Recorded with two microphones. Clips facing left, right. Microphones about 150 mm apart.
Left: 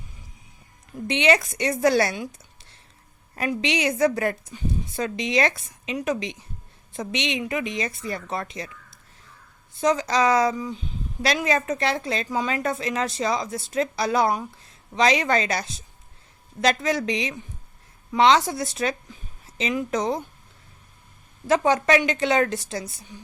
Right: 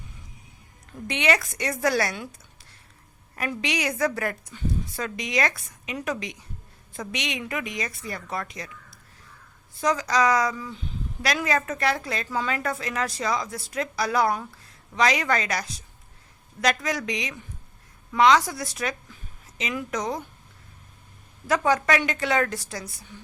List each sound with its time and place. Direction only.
1.0 s a woman's voice: 20° left (ahead or behind)
3.5 s a woman's voice: 25° left (ahead or behind)
21.4 s a woman's voice: 25° left (ahead or behind)